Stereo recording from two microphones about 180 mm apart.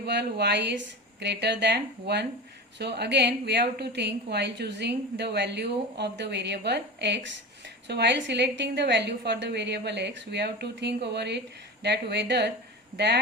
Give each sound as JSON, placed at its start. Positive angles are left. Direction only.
{"t": 0.0, "sound": "a woman's voice", "side_deg": -65}